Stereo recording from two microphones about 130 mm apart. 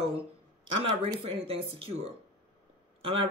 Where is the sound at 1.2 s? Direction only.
50° right (ahead or behind).